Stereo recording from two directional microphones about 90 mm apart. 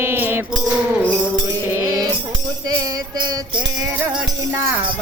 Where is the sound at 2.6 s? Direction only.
50° right (ahead or behind).